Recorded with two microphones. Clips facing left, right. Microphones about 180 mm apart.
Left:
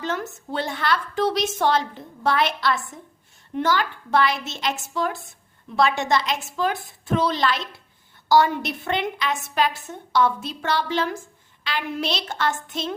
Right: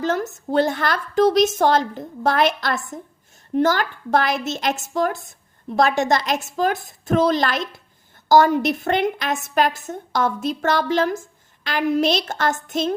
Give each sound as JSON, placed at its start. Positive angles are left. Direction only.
{"t": 0.0, "sound": "a woman's voice", "side_deg": -45}